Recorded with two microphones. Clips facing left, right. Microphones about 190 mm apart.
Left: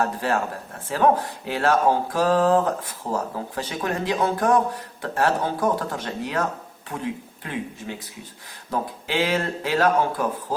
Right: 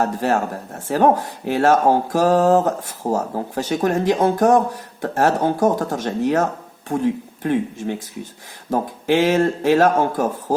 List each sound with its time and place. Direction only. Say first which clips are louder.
0.0 s speech: right 4 dB; 45° right (ahead or behind)
7.4 s speech: right 10 dB; 55° right (ahead or behind)